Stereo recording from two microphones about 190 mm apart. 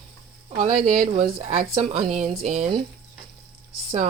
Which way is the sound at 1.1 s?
35° right (ahead or behind).